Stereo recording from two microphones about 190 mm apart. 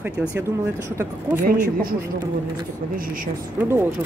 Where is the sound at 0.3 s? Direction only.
15° right (ahead or behind).